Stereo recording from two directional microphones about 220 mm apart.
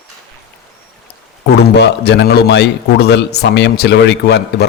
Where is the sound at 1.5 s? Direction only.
50° left (ahead or behind).